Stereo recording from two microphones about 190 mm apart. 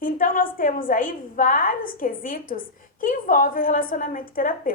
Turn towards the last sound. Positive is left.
turn(degrees=45)  # may be behind; listen again after turning